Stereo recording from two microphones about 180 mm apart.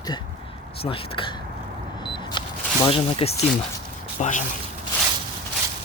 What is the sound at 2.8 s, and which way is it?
Speech, 30° left (ahead or behind).